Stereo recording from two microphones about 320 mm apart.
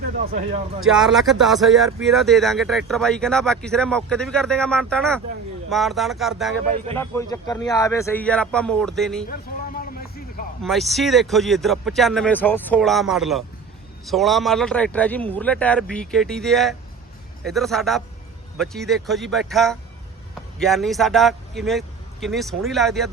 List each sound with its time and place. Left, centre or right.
0.3 s speech: right
0.9 s a man's voice: centre
9.3 s a sound: left
10.6 s speech: centre